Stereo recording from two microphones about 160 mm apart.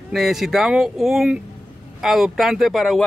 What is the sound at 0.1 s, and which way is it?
Speech, centre (ahead or behind).